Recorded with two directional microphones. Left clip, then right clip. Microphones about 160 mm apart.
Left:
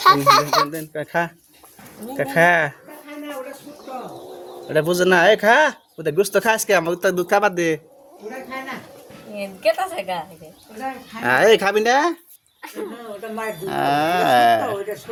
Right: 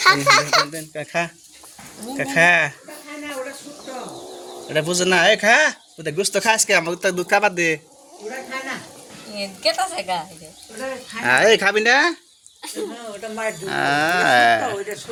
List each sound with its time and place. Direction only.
0.0 s a woman's voice: 10° left (ahead or behind)
0.7 s speech: 35° left (ahead or behind)
4.7 s speech: 35° left (ahead or behind)
9.3 s a woman's voice: 15° left (ahead or behind)
13.4 s speech: 25° left (ahead or behind)